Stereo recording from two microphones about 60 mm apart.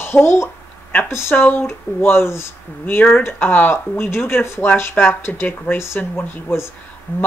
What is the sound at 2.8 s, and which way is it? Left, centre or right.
Speech, left.